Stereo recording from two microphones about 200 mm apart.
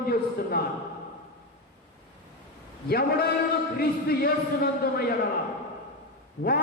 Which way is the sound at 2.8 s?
50° left (ahead or behind).